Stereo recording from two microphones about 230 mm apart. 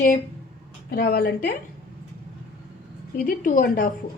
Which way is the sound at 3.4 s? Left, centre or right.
Left.